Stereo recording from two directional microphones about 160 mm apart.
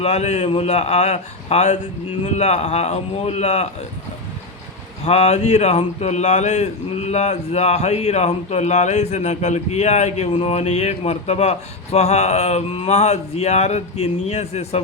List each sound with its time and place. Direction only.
0.0 s a man's voice: 40° left (ahead or behind)
5.0 s speech: 40° left (ahead or behind)